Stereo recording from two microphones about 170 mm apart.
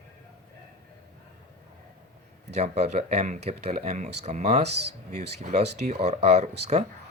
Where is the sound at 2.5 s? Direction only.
40° right (ahead or behind).